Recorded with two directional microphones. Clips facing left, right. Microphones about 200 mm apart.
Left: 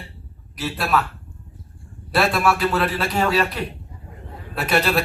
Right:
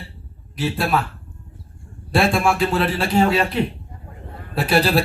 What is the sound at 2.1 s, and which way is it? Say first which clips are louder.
A man's voice: right 2 dB; 25° right (ahead or behind).